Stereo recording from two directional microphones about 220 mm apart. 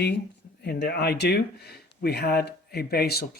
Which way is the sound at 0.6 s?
45° left (ahead or behind).